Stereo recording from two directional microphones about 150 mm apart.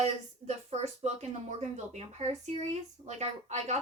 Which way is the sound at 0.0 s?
45° right (ahead or behind).